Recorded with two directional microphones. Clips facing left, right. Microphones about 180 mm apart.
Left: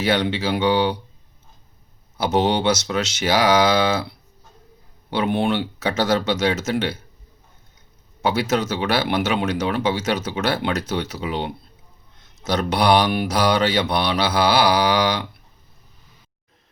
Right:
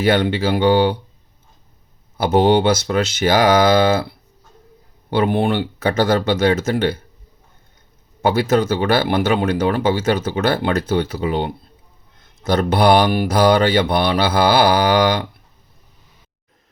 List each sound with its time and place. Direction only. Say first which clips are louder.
0.0 s speech: right 4 dB; 55° right (ahead or behind)
2.1 s speech: right 5 dB; 55° right (ahead or behind)
5.1 s speech: right 3 dB; 55° right (ahead or behind)
8.2 s speech: right 5 dB; 55° right (ahead or behind)